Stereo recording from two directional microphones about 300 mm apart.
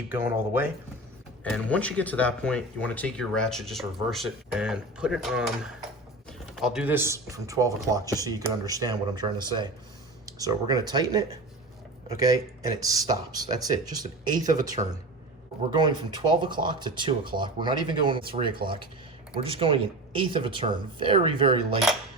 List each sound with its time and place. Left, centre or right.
0.1 s speech: centre
1.5 s speech: centre
10.2 s speech: centre
15.7 s speech: centre